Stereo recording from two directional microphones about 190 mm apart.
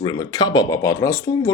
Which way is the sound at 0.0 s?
20° left (ahead or behind).